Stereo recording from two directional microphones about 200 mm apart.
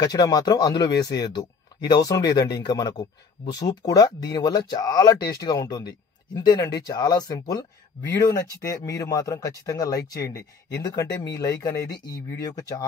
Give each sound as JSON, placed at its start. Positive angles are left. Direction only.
{"t": 0.0, "sound": "speech", "side_deg": 20}